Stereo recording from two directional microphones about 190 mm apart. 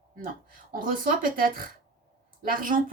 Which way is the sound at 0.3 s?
45° right (ahead or behind).